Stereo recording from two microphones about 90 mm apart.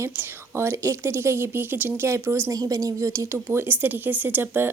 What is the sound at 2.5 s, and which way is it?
Speech, 40° right (ahead or behind).